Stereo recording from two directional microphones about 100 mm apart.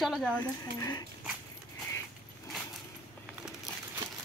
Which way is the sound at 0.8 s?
40° left (ahead or behind).